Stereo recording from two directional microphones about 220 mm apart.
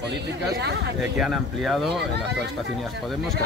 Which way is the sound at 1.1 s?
Centre (ahead or behind).